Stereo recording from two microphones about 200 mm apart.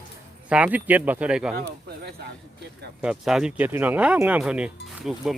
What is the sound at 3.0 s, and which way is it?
Speech, 5° right (ahead or behind).